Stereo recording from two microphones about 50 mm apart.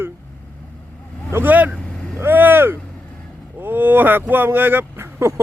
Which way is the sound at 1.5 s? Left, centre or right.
Right.